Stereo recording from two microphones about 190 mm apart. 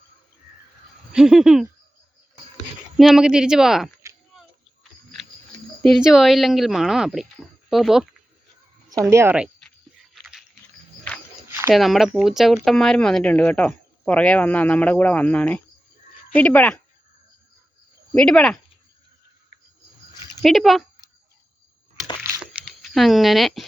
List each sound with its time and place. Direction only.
1.1 s speech: centre (ahead or behind)
3.0 s speech: 5° right (ahead or behind)
4.0 s a sound: 15° right (ahead or behind)
5.8 s speech: centre (ahead or behind)
8.9 s speech: 15° right (ahead or behind)
11.1 s a sound: 5° left (ahead or behind)
11.7 s speech: centre (ahead or behind)
18.1 s speech: 5° left (ahead or behind)
20.4 s speech: centre (ahead or behind)
22.6 s speech: centre (ahead or behind)